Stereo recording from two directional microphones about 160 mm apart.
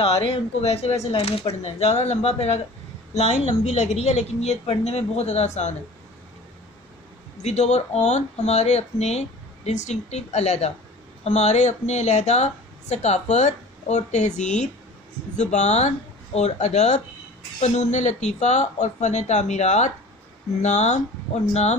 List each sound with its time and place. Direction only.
0.0 s speech: 35° left (ahead or behind)
7.4 s speech: 45° left (ahead or behind)